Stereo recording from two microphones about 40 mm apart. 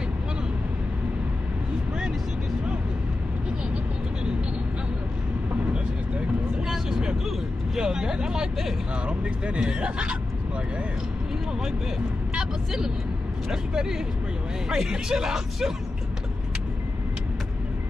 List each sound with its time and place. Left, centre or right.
6.7 s vehicle: centre
7.8 s speech: centre
9.0 s speech: right
12.4 s speech: centre